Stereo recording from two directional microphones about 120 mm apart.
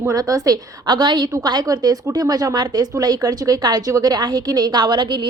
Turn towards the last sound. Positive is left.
turn(degrees=-40)  # may be behind; listen again after turning